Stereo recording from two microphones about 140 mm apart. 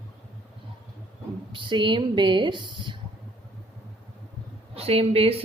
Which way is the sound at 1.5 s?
35° right (ahead or behind).